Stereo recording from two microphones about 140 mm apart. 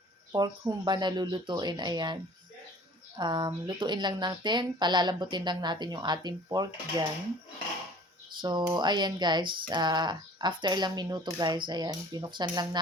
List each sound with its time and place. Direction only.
0.3 s speech: 30° right (ahead or behind)
3.2 s speech: 35° right (ahead or behind)
8.4 s speech: 30° right (ahead or behind)